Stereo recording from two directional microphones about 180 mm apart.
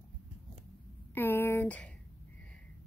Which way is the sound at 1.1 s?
10° left (ahead or behind).